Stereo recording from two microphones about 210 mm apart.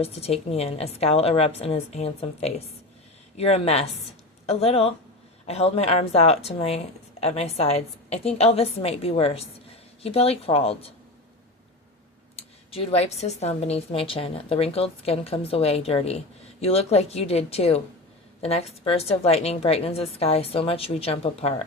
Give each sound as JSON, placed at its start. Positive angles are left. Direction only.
{"t": 0.0, "sound": "speech", "side_deg": 30}
{"t": 12.4, "sound": "speech", "side_deg": 30}